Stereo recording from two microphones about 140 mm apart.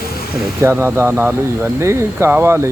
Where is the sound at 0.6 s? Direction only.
20° right (ahead or behind).